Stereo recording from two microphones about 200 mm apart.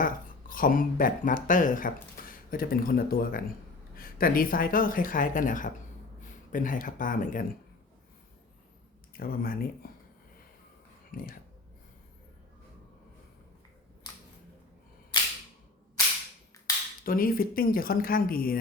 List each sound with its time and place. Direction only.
0.0 s speech: 45° left (ahead or behind)
9.1 s speech: 45° left (ahead or behind)
11.1 s speech: 45° left (ahead or behind)
17.1 s speech: 45° left (ahead or behind)